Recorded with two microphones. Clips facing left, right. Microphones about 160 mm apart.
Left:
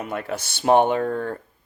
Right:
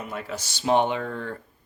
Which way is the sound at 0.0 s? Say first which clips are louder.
Left 5 dB; 60° left (ahead or behind).